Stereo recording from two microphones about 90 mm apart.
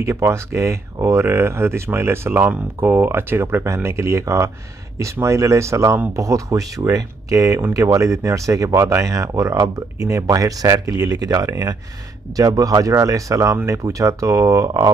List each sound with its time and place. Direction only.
0.0 s speech: 30° right (ahead or behind)